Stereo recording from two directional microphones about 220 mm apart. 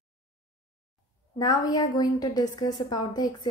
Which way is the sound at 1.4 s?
15° left (ahead or behind).